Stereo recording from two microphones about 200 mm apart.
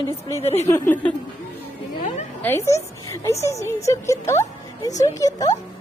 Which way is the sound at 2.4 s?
15° left (ahead or behind).